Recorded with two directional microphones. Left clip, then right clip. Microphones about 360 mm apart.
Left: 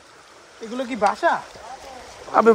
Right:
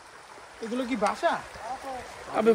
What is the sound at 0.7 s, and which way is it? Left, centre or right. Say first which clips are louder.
Speech: left 6 dB; left.